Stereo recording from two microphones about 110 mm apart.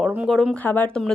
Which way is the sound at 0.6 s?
15° left (ahead or behind).